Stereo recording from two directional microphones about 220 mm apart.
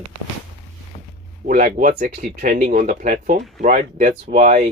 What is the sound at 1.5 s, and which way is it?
Speech, 35° right (ahead or behind).